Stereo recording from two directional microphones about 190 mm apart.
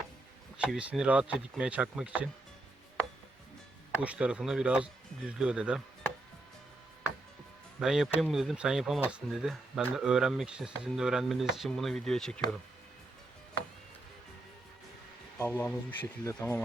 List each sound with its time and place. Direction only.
0.5 s speech: 5° right (ahead or behind)
4.0 s speech: 5° right (ahead or behind)
7.8 s speech: centre (ahead or behind)
15.4 s speech: 10° left (ahead or behind)